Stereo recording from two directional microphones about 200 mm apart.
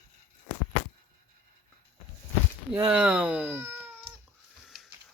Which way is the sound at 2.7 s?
10° right (ahead or behind).